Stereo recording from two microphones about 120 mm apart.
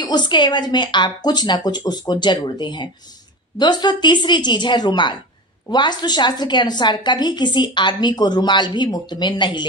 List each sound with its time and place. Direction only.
0.0 s a woman's voice: 40° left (ahead or behind)